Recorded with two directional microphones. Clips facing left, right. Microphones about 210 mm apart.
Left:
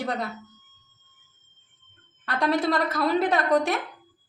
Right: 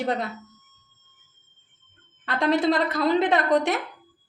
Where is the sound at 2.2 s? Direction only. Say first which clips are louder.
Right 2 dB; 25° right (ahead or behind).